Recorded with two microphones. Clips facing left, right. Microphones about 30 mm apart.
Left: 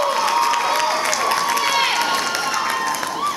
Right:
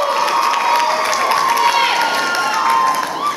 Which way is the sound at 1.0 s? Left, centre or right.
Centre.